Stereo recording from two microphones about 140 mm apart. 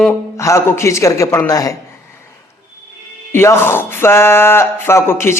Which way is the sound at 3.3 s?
15° left (ahead or behind).